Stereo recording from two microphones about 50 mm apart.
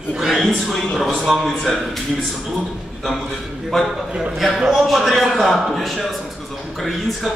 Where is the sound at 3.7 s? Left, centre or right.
Centre.